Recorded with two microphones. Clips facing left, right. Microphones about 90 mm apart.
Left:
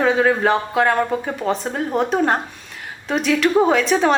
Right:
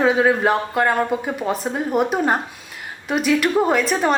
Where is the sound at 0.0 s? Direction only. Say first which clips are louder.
Even; 5° right (ahead or behind).